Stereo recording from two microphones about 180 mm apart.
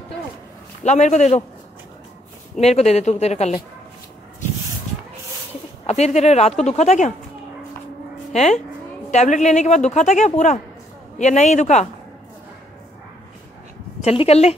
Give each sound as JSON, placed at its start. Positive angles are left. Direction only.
{"t": 0.8, "sound": "a woman's voice", "side_deg": 40}
{"t": 2.6, "sound": "a woman's voice", "side_deg": 35}
{"t": 5.9, "sound": "a woman's voice", "side_deg": 35}
{"t": 8.3, "sound": "a woman's voice", "side_deg": 40}
{"t": 14.0, "sound": "a woman's voice", "side_deg": 35}